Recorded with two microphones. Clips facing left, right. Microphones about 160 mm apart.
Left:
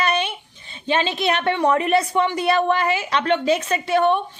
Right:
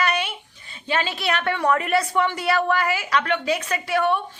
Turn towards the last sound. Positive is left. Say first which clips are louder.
# left 4 dB
turn(degrees=25)  # may be behind; listen again after turning